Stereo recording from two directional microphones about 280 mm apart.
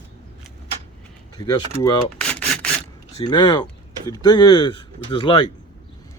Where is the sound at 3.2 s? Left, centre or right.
Centre.